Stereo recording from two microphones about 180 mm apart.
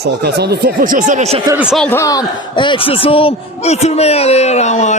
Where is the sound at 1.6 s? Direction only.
5° right (ahead or behind).